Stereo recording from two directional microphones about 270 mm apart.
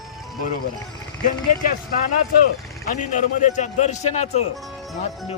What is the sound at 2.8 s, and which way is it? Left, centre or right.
Speech, left.